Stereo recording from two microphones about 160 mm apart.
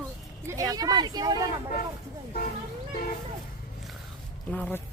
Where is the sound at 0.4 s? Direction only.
20° right (ahead or behind).